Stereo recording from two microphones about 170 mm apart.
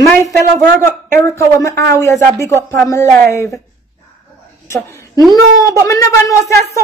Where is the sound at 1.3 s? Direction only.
20° left (ahead or behind).